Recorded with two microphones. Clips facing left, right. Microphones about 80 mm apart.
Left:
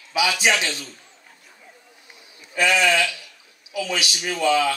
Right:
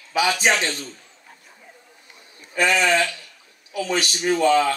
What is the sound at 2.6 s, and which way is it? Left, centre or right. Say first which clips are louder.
A man's voice: even; right.